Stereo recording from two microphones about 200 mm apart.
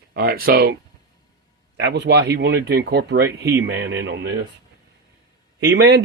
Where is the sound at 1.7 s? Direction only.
60° right (ahead or behind).